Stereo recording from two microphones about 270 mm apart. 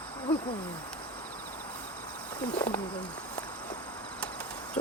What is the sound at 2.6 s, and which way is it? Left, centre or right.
Speech, left.